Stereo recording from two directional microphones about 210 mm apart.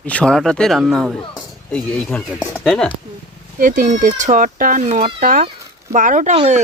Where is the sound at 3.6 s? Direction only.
40° right (ahead or behind).